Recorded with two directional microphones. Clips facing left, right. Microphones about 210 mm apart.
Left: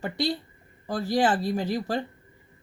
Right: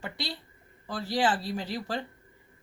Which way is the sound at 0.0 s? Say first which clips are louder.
Left 10 dB; 45° left (ahead or behind).